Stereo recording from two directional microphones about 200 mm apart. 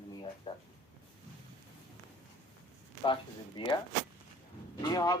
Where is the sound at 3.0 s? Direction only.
25° left (ahead or behind).